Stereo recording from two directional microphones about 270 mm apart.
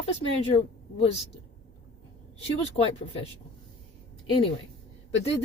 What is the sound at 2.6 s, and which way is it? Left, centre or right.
Speech, left.